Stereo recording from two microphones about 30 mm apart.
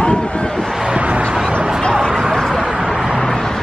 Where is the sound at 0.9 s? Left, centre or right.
Right.